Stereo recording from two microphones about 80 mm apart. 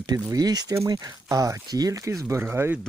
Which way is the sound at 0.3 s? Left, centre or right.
Right.